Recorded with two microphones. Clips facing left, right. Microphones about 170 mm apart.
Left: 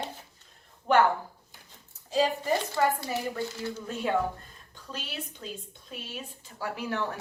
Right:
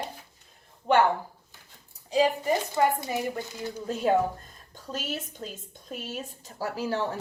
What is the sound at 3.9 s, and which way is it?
A woman's voice, 40° right (ahead or behind).